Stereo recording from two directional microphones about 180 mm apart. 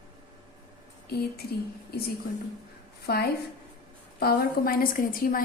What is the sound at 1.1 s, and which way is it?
Speech, 60° left (ahead or behind).